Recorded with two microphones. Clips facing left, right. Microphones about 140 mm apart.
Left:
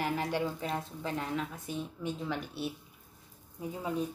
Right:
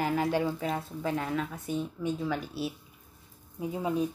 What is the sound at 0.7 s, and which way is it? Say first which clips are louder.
Speech: right 4 dB; 5° right (ahead or behind).